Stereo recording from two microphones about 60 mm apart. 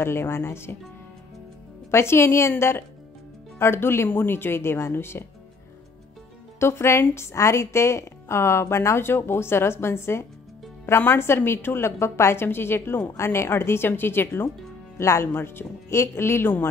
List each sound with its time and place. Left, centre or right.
0.0 s a woman's voice: left
1.9 s a woman's voice: left
3.5 s a woman's voice: left
6.6 s a woman's voice: left
13.1 s a woman's voice: left
15.0 s a woman's voice: left